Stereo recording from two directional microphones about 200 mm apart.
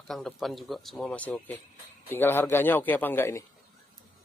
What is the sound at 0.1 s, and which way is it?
Speech, centre (ahead or behind).